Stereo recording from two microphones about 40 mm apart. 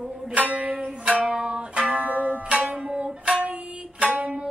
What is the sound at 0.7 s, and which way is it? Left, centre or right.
Music, right.